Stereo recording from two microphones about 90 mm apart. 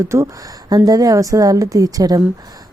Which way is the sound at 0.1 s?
30° right (ahead or behind).